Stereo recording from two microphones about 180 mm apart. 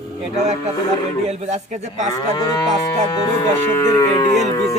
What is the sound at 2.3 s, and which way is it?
Livestock, 20° left (ahead or behind).